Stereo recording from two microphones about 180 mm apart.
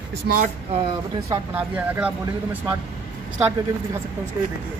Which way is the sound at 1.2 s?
10° right (ahead or behind).